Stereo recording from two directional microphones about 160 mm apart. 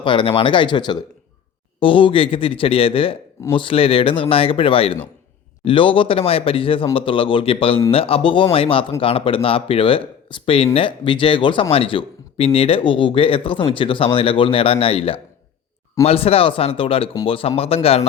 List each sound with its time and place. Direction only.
0.0 s speech: 30° left (ahead or behind)